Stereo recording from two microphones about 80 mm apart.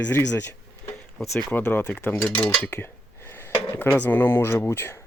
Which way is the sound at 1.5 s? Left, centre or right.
Left.